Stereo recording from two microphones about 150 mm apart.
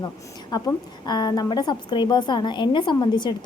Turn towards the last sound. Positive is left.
turn(degrees=30)  # may be behind; listen again after turning